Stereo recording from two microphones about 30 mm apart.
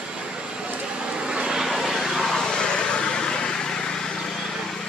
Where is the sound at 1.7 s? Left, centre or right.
Centre.